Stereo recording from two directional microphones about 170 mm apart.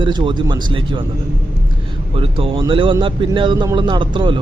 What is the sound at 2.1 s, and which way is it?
Speech, 30° right (ahead or behind).